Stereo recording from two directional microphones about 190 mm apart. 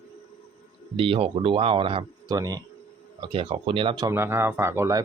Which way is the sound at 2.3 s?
20° right (ahead or behind).